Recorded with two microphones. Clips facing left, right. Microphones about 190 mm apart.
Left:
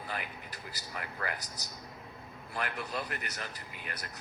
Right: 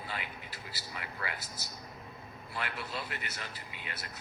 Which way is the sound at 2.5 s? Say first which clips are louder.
Left 2 dB; 45° left (ahead or behind).